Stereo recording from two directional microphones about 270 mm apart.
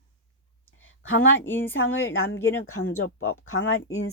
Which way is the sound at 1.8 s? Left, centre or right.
Left.